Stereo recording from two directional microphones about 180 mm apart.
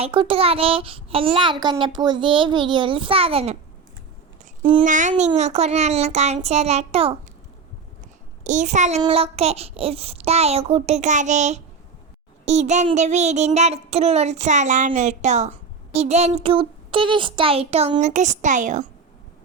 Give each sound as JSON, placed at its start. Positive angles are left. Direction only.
{"t": 0.0, "sound": "a child's voice", "side_deg": -30}
{"t": 4.8, "sound": "a child's voice", "side_deg": -45}
{"t": 8.4, "sound": "a child's voice", "side_deg": -40}